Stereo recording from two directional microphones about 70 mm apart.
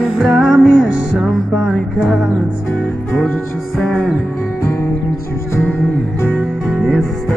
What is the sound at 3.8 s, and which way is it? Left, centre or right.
Music, centre.